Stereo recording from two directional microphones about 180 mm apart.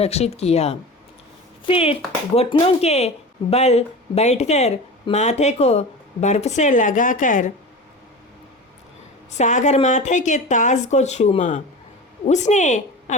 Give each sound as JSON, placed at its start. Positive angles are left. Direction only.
{"t": 0.0, "sound": "speech", "side_deg": 35}
{"t": 9.4, "sound": "a woman's voice", "side_deg": 40}